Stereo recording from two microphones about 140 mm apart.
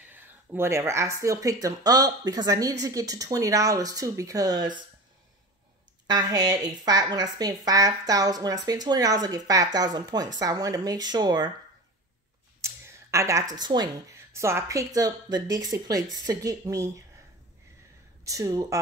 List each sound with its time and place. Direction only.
0.1 s speech: 15° right (ahead or behind); by 4.8 s 30° right (ahead or behind)
6.0 s speech: 25° right (ahead or behind)
12.6 s a sound: 20° right (ahead or behind)
14.1 s speech: 20° right (ahead or behind)
18.2 s speech: 25° right (ahead or behind)